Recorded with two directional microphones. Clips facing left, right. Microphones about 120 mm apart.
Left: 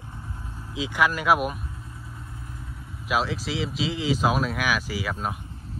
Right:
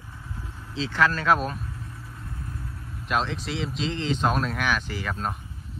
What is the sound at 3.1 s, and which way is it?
Speech, 5° left (ahead or behind).